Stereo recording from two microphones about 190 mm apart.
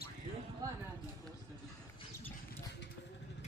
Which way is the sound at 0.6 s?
20° right (ahead or behind).